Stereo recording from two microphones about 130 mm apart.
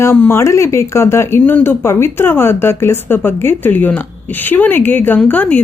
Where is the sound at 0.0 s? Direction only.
20° left (ahead or behind).